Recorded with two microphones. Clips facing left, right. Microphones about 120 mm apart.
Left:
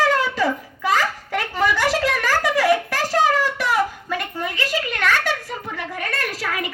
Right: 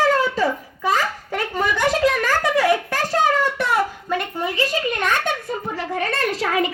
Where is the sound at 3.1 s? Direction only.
20° right (ahead or behind).